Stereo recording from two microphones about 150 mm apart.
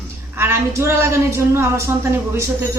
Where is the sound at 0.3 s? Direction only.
20° right (ahead or behind).